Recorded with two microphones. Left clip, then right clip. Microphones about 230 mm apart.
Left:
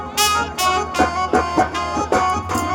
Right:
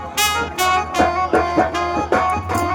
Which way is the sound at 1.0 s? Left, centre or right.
Left.